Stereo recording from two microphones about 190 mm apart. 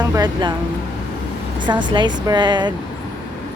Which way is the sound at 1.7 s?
25° right (ahead or behind).